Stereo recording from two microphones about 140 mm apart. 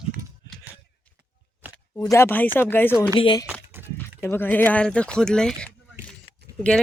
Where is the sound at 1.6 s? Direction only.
15° right (ahead or behind).